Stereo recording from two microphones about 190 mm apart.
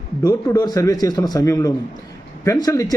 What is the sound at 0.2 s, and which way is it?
A man's voice, 20° left (ahead or behind).